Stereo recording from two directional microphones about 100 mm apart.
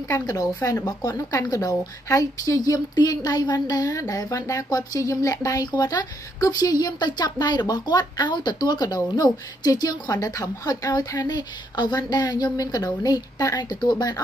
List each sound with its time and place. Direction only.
0.3 s a woman's voice: 35° left (ahead or behind)